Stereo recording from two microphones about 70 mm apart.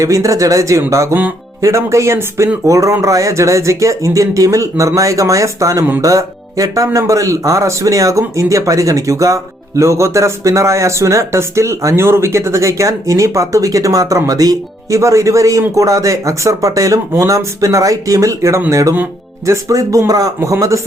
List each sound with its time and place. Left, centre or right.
0.0 s speech: right